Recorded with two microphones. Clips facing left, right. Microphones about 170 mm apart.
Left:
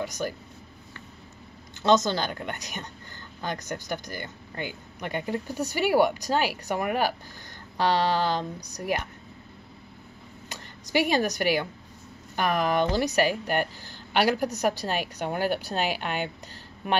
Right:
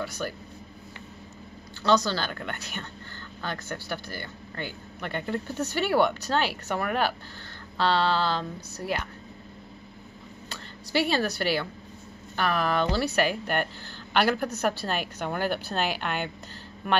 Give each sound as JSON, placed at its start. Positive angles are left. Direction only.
{"t": 0.2, "sound": "speech", "side_deg": 20}
{"t": 1.8, "sound": "speech", "side_deg": 20}
{"t": 10.5, "sound": "speech", "side_deg": 15}